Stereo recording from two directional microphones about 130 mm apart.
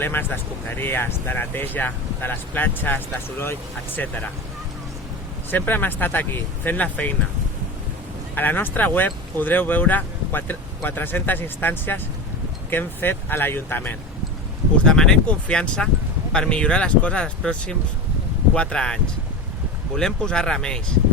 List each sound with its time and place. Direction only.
0.0 s speech: 15° left (ahead or behind)
5.5 s speech: 15° left (ahead or behind)
8.4 s speech: 15° left (ahead or behind)
20.0 s speech: 5° left (ahead or behind)